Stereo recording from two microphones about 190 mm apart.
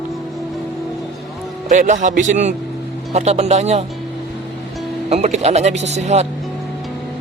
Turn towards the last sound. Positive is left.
turn(degrees=-35)  # may be behind; listen again after turning